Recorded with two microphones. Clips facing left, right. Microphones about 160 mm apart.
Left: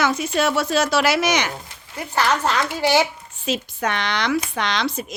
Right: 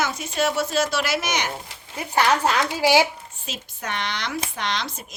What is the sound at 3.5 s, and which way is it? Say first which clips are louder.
Speech: left 9 dB; 90° left.